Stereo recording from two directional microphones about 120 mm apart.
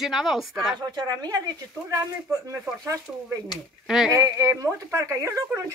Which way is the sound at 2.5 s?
25° right (ahead or behind).